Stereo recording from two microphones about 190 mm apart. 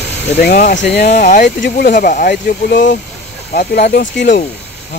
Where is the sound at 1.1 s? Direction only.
40° left (ahead or behind).